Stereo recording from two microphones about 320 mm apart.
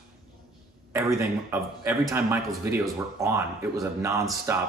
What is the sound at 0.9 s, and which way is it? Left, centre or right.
A man's voice, centre.